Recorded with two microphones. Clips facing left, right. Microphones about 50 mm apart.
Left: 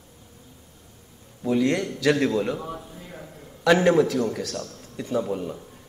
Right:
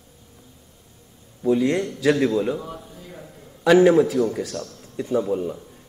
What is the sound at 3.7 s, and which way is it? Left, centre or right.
Speech, centre.